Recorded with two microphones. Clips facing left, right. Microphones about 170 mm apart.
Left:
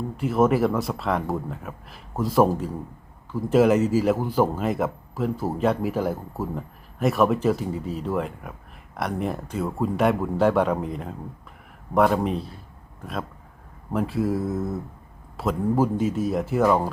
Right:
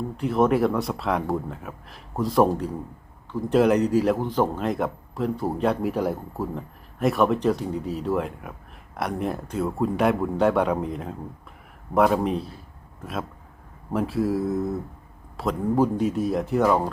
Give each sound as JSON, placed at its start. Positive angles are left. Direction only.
{"t": 0.2, "sound": "speech", "side_deg": 5}